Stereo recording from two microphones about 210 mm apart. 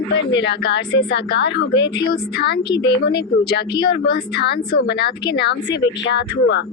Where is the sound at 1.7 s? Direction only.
20° left (ahead or behind).